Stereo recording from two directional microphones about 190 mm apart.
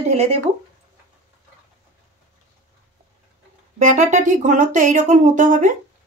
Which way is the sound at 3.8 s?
40° right (ahead or behind).